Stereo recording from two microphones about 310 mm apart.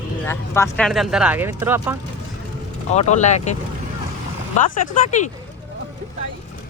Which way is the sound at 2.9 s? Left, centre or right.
Left.